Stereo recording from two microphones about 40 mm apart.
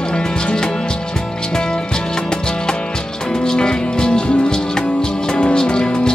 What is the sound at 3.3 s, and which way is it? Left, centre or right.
Music, centre.